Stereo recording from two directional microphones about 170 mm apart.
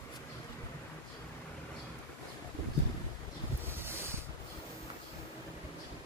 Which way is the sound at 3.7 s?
15° right (ahead or behind).